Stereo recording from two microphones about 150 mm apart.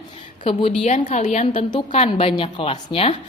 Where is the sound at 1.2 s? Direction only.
55° left (ahead or behind).